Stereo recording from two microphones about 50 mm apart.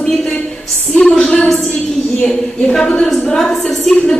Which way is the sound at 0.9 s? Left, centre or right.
Centre.